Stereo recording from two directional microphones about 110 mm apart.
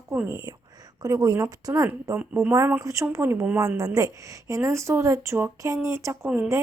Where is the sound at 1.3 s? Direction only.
25° right (ahead or behind).